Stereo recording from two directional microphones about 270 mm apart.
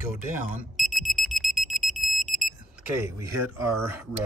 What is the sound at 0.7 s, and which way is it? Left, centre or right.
Alarm, centre.